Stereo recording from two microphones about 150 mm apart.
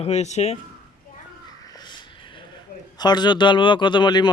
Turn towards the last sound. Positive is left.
turn(degrees=30)  # may be behind; listen again after turning